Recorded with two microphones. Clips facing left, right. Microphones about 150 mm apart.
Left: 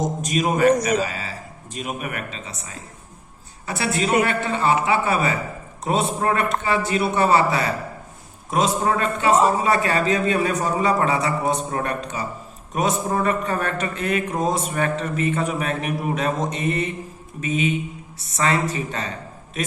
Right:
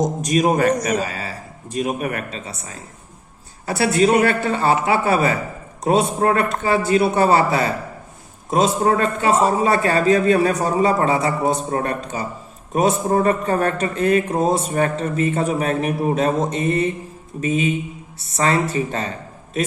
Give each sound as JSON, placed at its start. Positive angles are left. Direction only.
{"t": 0.3, "sound": "a man's voice", "side_deg": -40}